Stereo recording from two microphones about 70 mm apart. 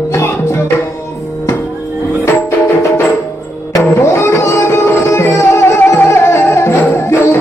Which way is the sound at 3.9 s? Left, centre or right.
Left.